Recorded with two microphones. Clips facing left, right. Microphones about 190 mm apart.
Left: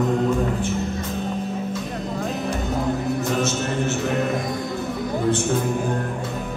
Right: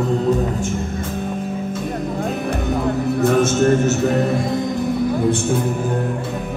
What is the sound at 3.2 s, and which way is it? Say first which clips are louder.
Music: right 8 dB; 50° right (ahead or behind).